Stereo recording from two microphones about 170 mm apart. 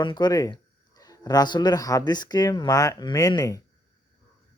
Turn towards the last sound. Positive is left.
turn(degrees=20)  # may be behind; listen again after turning